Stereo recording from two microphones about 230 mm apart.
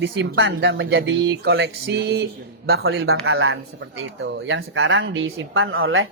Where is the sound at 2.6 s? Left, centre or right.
Right.